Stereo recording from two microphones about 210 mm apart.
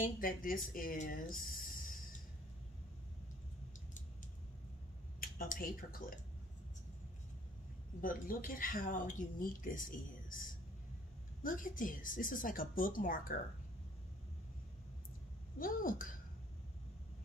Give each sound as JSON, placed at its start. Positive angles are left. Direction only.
{"t": 0.0, "sound": "speech", "side_deg": 40}
{"t": 5.2, "sound": "speech", "side_deg": 45}
{"t": 8.0, "sound": "speech", "side_deg": 40}
{"t": 15.6, "sound": "speech", "side_deg": 40}